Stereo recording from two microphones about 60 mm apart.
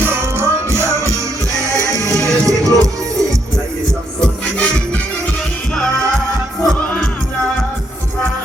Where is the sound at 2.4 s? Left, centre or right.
Right.